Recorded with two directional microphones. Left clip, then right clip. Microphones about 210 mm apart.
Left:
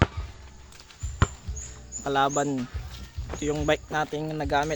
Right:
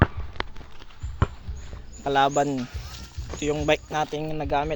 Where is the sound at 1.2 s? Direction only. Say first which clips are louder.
Left 2 dB; 5° right (ahead or behind).